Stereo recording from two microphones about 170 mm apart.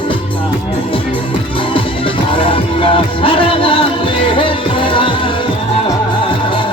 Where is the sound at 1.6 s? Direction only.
30° left (ahead or behind).